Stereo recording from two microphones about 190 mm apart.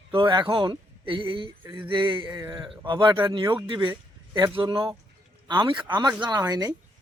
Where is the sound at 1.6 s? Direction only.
10° right (ahead or behind).